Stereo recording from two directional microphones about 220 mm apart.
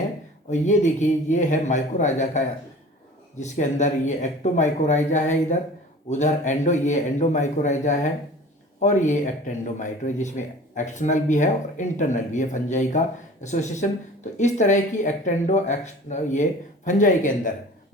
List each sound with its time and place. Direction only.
0.5 s speech: 30° left (ahead or behind)